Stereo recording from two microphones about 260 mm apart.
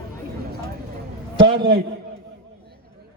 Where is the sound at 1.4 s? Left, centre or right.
Centre.